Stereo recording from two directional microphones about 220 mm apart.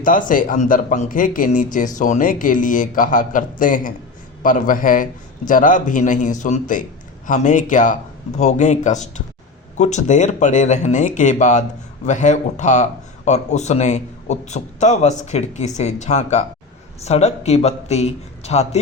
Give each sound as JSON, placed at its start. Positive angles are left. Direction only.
{"t": 0.0, "sound": "speech", "side_deg": 40}